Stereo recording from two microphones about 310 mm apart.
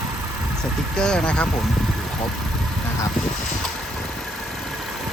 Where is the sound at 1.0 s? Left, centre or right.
Centre.